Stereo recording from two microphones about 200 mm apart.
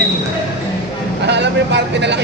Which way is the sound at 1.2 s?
60° right (ahead or behind).